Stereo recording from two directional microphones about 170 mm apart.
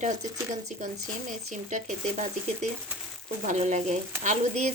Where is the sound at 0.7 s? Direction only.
45° right (ahead or behind).